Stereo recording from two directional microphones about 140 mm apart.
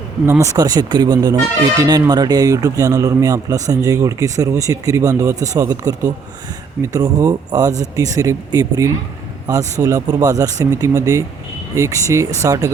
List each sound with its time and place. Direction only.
0.3 s speech: 20° right (ahead or behind)